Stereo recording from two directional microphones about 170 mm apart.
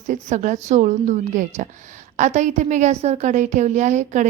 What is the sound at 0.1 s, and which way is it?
A woman's voice, 45° right (ahead or behind).